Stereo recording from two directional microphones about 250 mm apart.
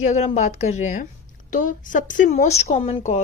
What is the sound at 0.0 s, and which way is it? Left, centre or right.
A woman's voice, left.